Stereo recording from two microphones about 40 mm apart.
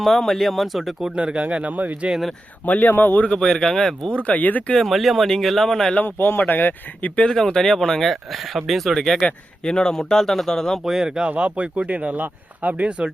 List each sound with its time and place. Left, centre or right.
0.0 s speech: centre
1.1 s speech: right
2.6 s speech: left
3.3 s speech: centre
4.2 s speech: left
4.9 s speech: centre
6.1 s speech: left
7.3 s speech: centre
9.2 s speech: centre
10.8 s speech: centre
11.3 s speech: right